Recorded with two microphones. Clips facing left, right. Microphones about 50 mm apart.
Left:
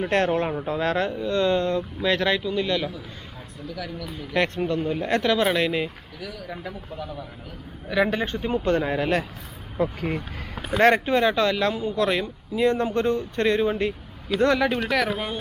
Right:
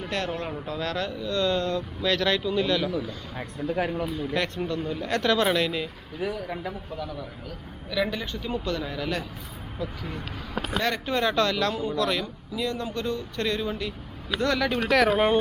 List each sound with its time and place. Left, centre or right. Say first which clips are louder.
0.0 s speech: left 8 dB; left; by 2.9 s centre
3.7 s speech: right 6 dB; right
4.4 s speech: left 7 dB; left
5.2 s speech: right 1 dB; centre
6.1 s speech: right 9 dB; right
6.5 s a man's voice: right 2 dB; centre
6.9 s speech: even; left
7.9 s speech: left 5 dB; left
14.8 s a man's voice: right 3 dB; centre